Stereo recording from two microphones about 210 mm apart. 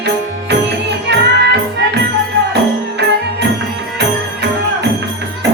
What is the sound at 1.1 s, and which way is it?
Music, 55° right (ahead or behind).